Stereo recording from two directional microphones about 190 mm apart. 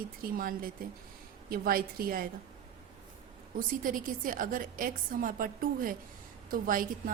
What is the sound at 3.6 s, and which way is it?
A woman's voice, 45° right (ahead or behind).